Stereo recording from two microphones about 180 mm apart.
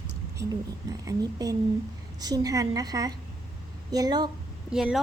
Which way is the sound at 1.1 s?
20° right (ahead or behind).